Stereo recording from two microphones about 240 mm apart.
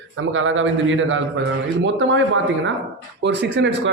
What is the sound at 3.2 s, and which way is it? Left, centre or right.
Speech, right.